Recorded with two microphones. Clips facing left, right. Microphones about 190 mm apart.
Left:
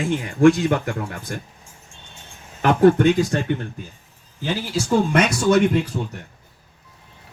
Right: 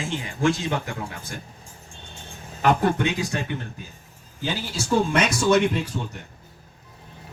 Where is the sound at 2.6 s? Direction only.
50° left (ahead or behind).